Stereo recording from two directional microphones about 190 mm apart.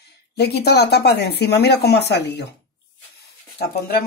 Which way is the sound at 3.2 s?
55° left (ahead or behind).